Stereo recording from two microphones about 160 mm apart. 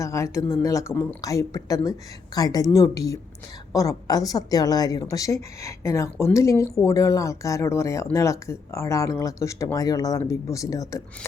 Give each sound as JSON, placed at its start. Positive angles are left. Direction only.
{"t": 0.0, "sound": "speech", "side_deg": 20}